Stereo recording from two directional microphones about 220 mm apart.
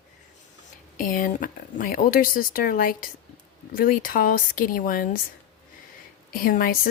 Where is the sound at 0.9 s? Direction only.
40° left (ahead or behind).